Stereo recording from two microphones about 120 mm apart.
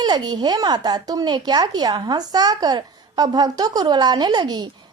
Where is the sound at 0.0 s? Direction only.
35° right (ahead or behind).